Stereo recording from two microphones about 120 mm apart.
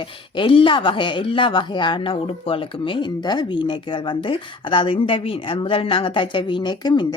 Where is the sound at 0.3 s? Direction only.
45° left (ahead or behind).